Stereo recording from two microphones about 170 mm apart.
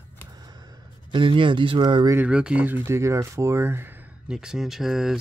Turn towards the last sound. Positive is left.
turn(degrees=0)  # may be behind; listen again after turning